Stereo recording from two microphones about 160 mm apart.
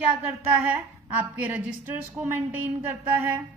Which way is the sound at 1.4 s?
10° right (ahead or behind).